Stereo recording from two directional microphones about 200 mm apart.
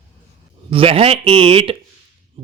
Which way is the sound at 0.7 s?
30° right (ahead or behind).